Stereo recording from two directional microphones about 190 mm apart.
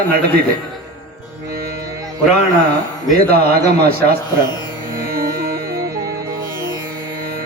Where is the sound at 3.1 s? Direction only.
50° right (ahead or behind).